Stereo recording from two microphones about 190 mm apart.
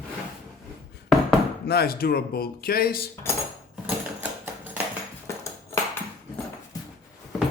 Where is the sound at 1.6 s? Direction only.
55° left (ahead or behind).